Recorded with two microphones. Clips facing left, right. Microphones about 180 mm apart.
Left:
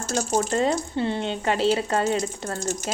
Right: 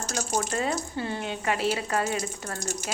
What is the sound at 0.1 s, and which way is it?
Speech, 35° left (ahead or behind).